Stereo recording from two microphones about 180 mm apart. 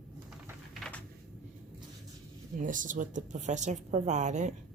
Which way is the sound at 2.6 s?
45° right (ahead or behind).